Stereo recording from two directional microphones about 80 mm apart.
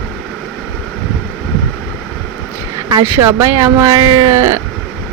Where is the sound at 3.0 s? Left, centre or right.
Right.